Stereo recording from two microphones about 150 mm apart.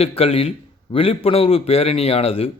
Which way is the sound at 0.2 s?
40° left (ahead or behind).